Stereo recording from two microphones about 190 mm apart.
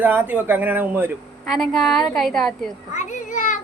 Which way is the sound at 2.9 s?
40° left (ahead or behind).